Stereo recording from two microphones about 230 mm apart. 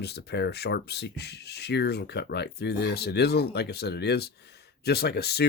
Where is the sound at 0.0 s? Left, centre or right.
Left.